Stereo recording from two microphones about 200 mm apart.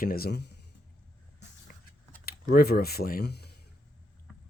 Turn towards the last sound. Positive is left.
turn(degrees=55)  # may be behind; listen again after turning